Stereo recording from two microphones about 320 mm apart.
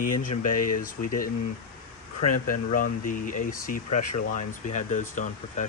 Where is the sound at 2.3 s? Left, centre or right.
Left.